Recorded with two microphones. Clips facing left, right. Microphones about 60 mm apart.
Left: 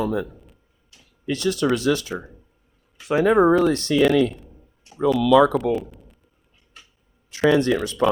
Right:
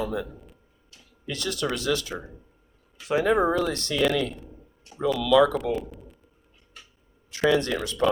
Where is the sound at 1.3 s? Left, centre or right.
Left.